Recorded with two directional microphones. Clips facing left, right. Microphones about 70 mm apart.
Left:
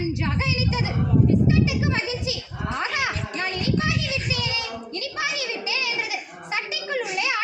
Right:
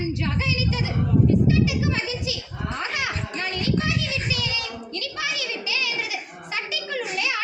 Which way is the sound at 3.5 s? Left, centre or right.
Left.